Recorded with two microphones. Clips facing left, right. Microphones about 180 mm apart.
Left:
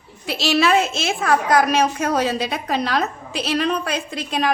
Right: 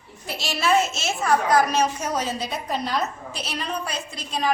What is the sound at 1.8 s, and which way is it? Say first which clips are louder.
A woman's voice: left 5 dB; 65° left (ahead or behind).